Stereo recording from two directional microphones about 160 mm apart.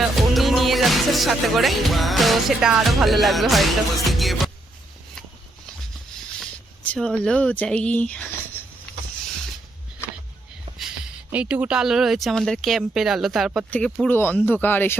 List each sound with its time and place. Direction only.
0.0 s music: centre (ahead or behind)
6.4 s speech: 5° left (ahead or behind)
10.7 s a sound: 35° right (ahead or behind)
11.3 s speech: 10° right (ahead or behind)
13.7 s speech: 10° left (ahead or behind)